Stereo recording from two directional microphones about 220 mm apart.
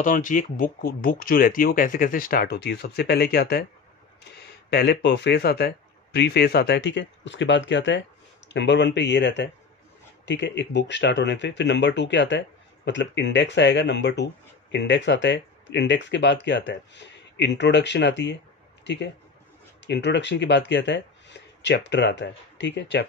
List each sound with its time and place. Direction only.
0.0 s speech: 35° left (ahead or behind); by 23.0 s 55° left (ahead or behind)